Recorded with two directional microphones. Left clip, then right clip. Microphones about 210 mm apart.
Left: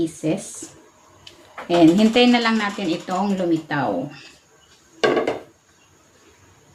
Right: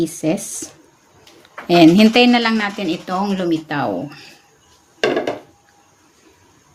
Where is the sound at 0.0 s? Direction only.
60° right (ahead or behind).